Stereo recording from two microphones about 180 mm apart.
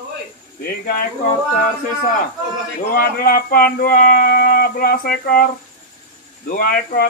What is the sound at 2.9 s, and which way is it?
Speech, 55° left (ahead or behind).